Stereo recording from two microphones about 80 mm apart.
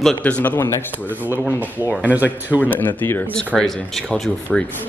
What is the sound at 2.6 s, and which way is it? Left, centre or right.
Speech, left.